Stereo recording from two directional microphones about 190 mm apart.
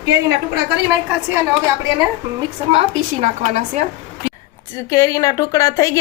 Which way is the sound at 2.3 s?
30° right (ahead or behind).